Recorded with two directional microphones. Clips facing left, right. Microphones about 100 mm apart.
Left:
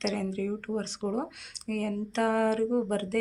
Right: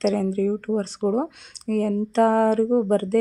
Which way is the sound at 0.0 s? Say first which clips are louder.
Right 9 dB; 40° right (ahead or behind).